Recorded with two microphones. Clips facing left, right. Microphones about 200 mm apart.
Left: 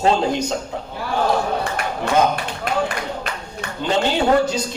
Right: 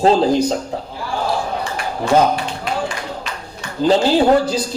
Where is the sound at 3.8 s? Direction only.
35° right (ahead or behind).